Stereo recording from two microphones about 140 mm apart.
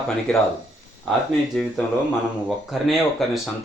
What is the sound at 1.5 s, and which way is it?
Speech, 5° left (ahead or behind).